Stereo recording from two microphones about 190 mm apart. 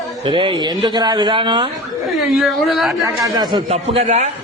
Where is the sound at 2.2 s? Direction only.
Centre (ahead or behind).